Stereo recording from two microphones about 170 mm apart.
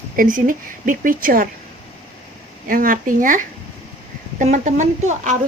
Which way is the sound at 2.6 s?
55° right (ahead or behind).